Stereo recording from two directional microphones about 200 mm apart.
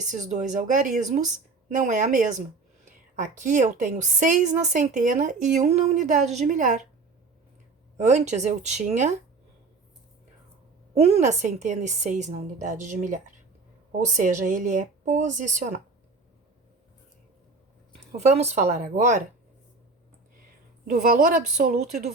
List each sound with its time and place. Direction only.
0.1 s a woman's voice: 35° right (ahead or behind)
7.9 s a woman's voice: 35° right (ahead or behind)
10.9 s a woman's voice: 30° right (ahead or behind)
18.2 s a woman's voice: 35° right (ahead or behind)
20.8 s speech: 45° right (ahead or behind)